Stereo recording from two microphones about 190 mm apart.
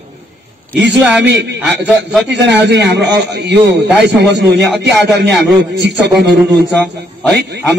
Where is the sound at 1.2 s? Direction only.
65° right (ahead or behind).